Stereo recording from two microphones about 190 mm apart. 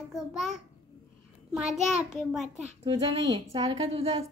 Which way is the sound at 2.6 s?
25° right (ahead or behind).